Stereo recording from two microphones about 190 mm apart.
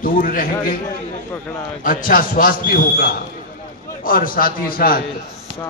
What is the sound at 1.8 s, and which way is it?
A man's voice, 45° left (ahead or behind).